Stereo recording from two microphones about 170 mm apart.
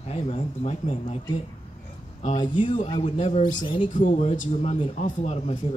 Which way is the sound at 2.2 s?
45° left (ahead or behind).